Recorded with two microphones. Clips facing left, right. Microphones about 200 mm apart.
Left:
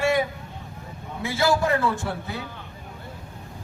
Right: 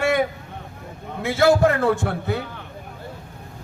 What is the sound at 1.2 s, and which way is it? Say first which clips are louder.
Speech: right 6 dB; 60° right (ahead or behind).